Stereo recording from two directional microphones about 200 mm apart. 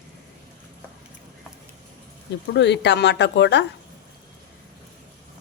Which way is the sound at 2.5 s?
60° left (ahead or behind).